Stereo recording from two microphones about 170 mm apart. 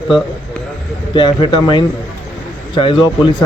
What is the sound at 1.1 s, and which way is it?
Speech, 30° left (ahead or behind).